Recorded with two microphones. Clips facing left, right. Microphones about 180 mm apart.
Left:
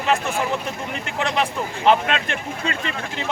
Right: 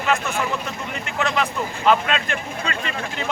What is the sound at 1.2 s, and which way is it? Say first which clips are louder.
Speech: even; 30° left (ahead or behind).